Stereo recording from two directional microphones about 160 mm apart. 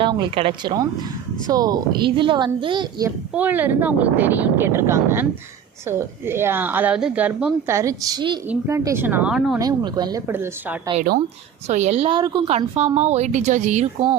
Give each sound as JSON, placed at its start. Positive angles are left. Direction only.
{"t": 0.0, "sound": "speech", "side_deg": -30}
{"t": 3.3, "sound": "speech", "side_deg": -10}
{"t": 7.7, "sound": "speech", "side_deg": -20}
{"t": 8.4, "sound": "speech", "side_deg": -15}
{"t": 9.6, "sound": "speech", "side_deg": -25}
{"t": 11.7, "sound": "a woman's voice", "side_deg": -45}
{"t": 12.1, "sound": "speech", "side_deg": -30}
{"t": 12.5, "sound": "a woman's voice", "side_deg": -40}